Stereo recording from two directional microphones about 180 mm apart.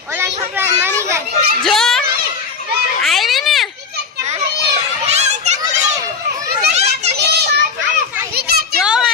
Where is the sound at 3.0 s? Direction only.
Centre (ahead or behind).